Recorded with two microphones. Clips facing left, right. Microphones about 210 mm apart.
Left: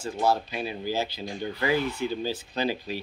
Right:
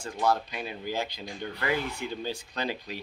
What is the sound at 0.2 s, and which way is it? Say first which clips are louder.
Speech: left 2 dB; 30° left (ahead or behind).